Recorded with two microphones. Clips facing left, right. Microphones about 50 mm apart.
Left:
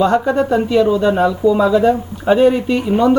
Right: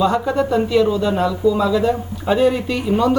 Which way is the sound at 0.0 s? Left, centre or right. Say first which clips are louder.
Left 3 dB; left.